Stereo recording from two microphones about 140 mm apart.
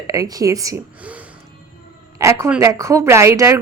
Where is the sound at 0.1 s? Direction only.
25° right (ahead or behind).